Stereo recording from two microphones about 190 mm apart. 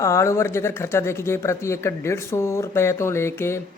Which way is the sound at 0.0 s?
15° left (ahead or behind).